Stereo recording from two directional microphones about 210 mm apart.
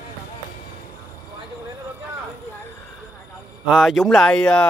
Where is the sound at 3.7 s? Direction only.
Centre (ahead or behind).